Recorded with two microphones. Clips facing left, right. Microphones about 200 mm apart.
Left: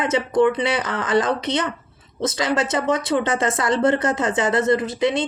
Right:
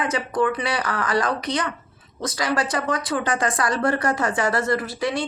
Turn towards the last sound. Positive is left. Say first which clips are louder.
# left 4 dB
turn(degrees=20)  # may be behind; listen again after turning